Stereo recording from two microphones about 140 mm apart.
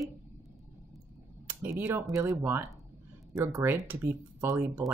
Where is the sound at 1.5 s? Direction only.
15° right (ahead or behind).